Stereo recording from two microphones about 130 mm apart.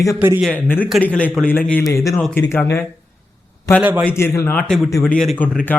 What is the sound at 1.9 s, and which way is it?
Speech, 25° left (ahead or behind).